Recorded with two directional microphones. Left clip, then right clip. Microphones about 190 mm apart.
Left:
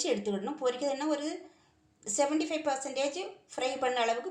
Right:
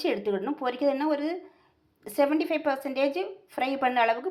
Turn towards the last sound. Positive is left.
turn(degrees=-30)  # may be behind; listen again after turning